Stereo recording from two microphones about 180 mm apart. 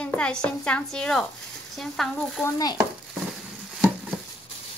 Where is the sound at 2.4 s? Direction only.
20° left (ahead or behind).